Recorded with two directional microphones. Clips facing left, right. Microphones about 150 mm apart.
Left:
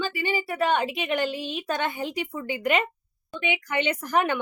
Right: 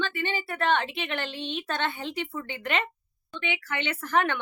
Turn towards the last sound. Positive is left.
turn(degrees=10)  # may be behind; listen again after turning